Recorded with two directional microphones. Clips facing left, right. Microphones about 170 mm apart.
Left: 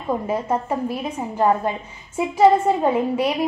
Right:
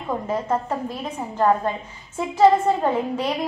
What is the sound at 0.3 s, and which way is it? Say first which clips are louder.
A woman's voice: right 1 dB; 10° left (ahead or behind).